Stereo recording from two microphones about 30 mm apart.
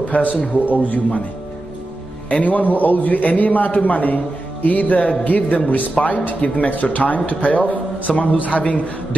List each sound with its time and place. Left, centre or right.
0.1 s a man's voice: left
2.2 s a man's voice: left
6.7 s a man's voice: left